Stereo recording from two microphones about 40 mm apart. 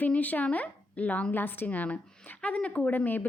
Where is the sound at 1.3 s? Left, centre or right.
Left.